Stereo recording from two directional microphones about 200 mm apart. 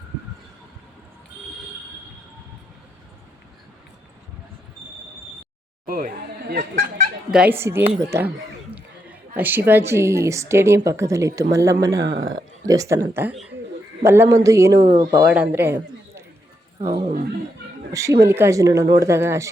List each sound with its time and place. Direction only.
5.8 s a sound: 45° right (ahead or behind)
7.3 s a woman's voice: 5° right (ahead or behind)
13.3 s speech: centre (ahead or behind)
14.0 s speech: 15° right (ahead or behind)
15.3 s a man's voice: 10° right (ahead or behind)
17.1 s speech: 45° right (ahead or behind)
17.9 s speech: 15° right (ahead or behind)